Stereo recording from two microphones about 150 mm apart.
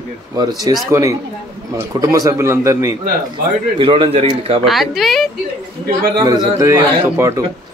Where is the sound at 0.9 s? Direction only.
20° right (ahead or behind).